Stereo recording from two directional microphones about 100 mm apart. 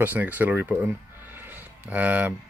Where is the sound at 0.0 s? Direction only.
15° right (ahead or behind).